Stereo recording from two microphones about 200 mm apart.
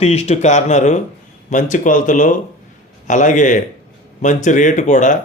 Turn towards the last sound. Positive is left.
turn(degrees=40)  # may be behind; listen again after turning